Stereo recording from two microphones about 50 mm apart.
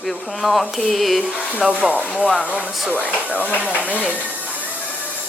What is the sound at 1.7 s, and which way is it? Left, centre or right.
Speech, right.